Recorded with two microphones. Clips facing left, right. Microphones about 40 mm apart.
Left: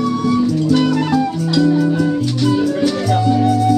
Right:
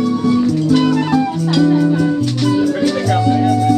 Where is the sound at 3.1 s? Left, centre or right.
Centre.